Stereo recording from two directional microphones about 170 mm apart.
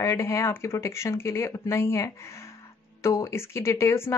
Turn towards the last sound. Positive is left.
turn(degrees=15)  # may be behind; listen again after turning